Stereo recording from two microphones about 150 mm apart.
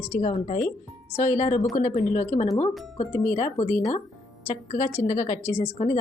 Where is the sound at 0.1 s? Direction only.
45° left (ahead or behind).